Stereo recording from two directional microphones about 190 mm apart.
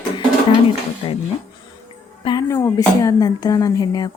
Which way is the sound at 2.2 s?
20° left (ahead or behind).